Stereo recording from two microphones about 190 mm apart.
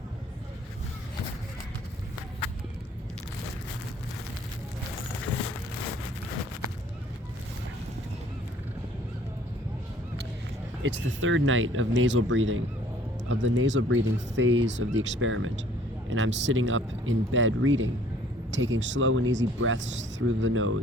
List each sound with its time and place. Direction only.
10.8 s speech: 80° right
14.9 s speech: 85° right
16.0 s speech: 75° right (ahead or behind)